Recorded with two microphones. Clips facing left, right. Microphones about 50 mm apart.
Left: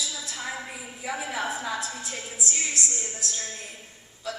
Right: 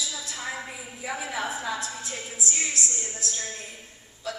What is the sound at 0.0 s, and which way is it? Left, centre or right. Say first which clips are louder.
A woman's voice: even; centre.